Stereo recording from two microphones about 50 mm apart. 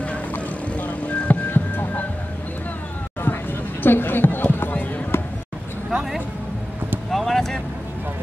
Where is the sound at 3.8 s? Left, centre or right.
Left.